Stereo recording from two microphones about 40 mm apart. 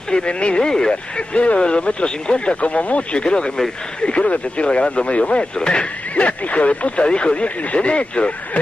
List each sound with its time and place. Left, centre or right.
0.1 s speech: left
1.3 s speech: left